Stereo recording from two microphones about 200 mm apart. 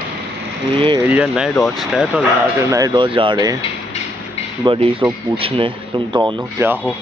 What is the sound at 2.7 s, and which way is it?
Speech, 20° right (ahead or behind).